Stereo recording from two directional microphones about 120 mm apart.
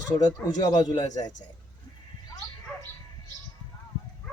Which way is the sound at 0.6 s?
35° left (ahead or behind).